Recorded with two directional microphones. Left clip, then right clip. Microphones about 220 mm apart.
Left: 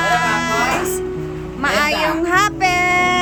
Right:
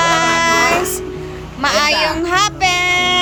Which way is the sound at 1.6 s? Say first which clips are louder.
Right 3 dB; 10° left (ahead or behind).